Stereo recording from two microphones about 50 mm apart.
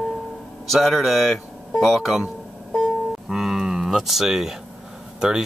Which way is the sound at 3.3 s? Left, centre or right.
Centre.